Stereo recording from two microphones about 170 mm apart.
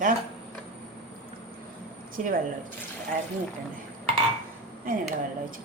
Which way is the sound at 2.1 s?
55° right (ahead or behind).